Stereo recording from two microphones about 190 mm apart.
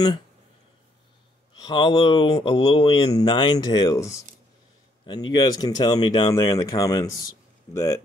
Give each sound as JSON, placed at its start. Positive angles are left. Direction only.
{"t": 1.6, "sound": "speech", "side_deg": 25}
{"t": 5.3, "sound": "speech", "side_deg": 20}